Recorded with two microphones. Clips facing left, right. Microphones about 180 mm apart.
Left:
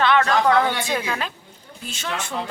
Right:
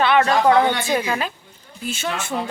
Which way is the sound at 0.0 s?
15° right (ahead or behind).